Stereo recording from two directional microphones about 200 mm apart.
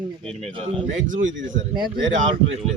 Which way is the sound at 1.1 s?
40° right (ahead or behind).